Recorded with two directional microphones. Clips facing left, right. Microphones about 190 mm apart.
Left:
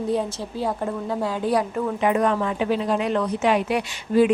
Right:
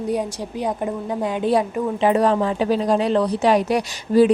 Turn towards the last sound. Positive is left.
turn(degrees=-40)  # may be behind; listen again after turning